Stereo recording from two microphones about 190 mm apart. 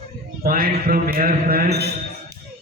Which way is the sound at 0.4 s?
50° right (ahead or behind).